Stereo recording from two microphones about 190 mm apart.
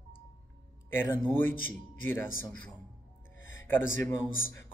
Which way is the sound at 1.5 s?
90° left.